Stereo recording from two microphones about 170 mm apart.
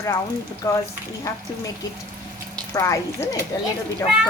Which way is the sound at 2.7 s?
15° left (ahead or behind).